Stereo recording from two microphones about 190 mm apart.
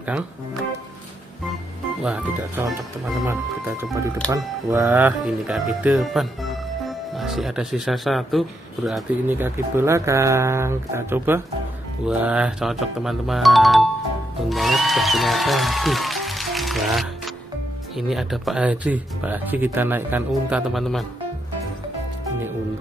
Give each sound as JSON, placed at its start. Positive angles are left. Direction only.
{"t": 2.0, "sound": "speech", "side_deg": -5}
{"t": 3.3, "sound": "speech", "side_deg": -15}
{"t": 4.9, "sound": "speech", "side_deg": -5}
{"t": 9.3, "sound": "speech", "side_deg": -10}